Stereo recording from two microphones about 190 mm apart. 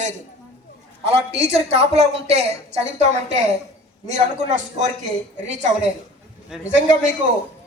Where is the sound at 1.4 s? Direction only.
35° right (ahead or behind).